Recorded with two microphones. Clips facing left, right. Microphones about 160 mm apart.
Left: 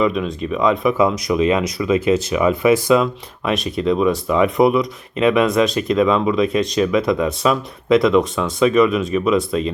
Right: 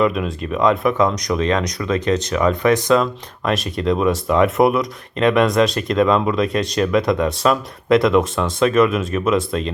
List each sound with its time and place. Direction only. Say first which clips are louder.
0.0 s speech: even; centre (ahead or behind)